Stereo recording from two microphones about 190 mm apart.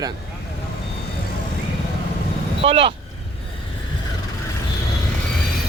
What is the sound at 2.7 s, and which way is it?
Speech, 30° right (ahead or behind).